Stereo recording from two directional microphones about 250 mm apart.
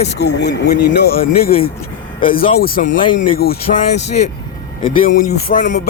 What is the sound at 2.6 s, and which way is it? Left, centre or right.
Speech, left.